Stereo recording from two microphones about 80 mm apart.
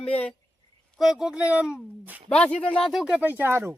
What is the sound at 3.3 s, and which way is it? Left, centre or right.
Speech, right.